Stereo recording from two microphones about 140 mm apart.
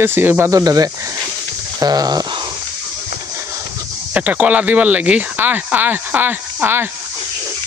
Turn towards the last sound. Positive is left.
turn(degrees=-15)  # may be behind; listen again after turning